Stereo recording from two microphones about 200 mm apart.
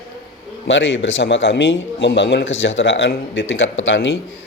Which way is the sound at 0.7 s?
70° left (ahead or behind).